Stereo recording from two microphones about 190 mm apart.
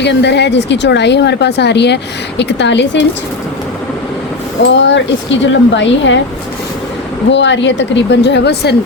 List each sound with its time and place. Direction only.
0.0 s speech: 65° left (ahead or behind)
4.7 s speech: 70° left (ahead or behind)
7.3 s speech: 70° left (ahead or behind)